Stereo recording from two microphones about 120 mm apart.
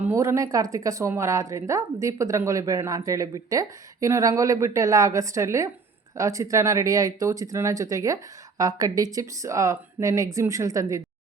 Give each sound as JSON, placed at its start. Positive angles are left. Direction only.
{"t": 0.0, "sound": "a woman's voice", "side_deg": -20}